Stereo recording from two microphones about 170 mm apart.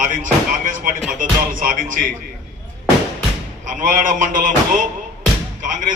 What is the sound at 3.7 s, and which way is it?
A man's voice, 50° right (ahead or behind).